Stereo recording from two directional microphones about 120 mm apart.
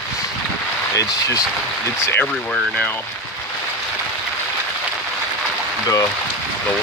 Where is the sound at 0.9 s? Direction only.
30° left (ahead or behind).